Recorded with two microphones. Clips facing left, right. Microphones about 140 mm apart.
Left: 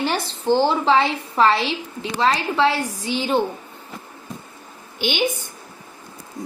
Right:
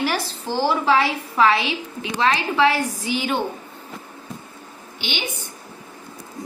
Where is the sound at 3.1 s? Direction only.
30° left (ahead or behind).